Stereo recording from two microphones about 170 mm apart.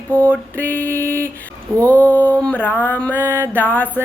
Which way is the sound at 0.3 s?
10° left (ahead or behind).